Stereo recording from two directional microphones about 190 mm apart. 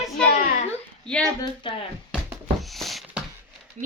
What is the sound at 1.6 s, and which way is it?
Speech, 25° left (ahead or behind).